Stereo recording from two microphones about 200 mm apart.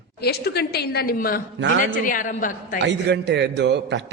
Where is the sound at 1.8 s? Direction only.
40° left (ahead or behind).